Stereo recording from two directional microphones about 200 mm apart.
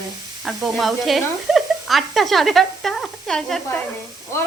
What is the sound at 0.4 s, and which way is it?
Speech, centre (ahead or behind).